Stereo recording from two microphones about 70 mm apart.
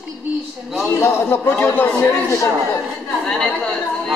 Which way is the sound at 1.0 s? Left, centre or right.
Left.